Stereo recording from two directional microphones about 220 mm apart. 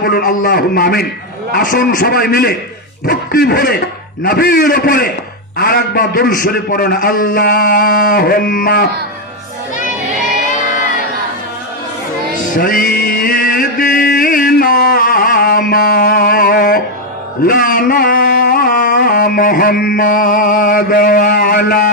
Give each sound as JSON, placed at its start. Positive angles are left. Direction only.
{"t": 0.0, "sound": "a man's voice", "side_deg": 45}
{"t": 12.5, "sound": "chant", "side_deg": 40}
{"t": 17.4, "sound": "a sound", "side_deg": 40}